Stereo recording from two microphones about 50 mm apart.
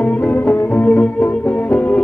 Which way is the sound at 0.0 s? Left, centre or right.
Left.